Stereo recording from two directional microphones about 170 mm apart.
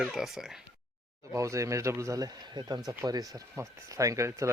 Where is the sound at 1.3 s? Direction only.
20° right (ahead or behind).